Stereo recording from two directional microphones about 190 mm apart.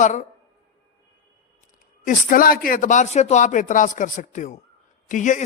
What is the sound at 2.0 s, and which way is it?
Speech, 45° left (ahead or behind).